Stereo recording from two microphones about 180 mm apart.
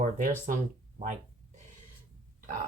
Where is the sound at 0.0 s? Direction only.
45° right (ahead or behind).